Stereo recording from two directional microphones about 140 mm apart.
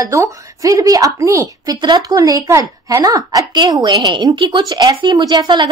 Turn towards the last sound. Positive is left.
turn(degrees=-30)  # may be behind; listen again after turning